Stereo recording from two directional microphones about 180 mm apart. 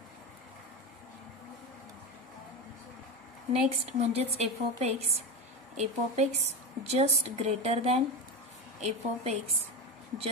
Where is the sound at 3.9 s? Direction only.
35° right (ahead or behind).